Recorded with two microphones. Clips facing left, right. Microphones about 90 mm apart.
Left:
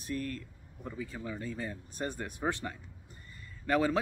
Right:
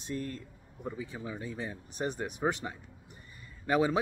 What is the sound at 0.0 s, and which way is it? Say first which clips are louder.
Speech: even; 25° right (ahead or behind).